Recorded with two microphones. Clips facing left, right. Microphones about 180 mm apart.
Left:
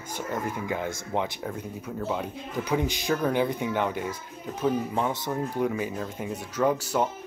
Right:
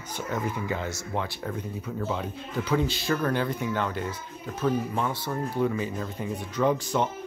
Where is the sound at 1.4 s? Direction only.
10° left (ahead or behind).